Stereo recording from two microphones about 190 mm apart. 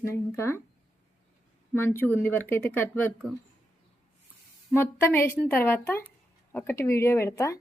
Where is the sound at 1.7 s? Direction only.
10° left (ahead or behind).